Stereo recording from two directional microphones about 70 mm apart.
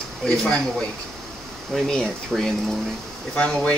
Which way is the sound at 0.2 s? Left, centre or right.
Centre.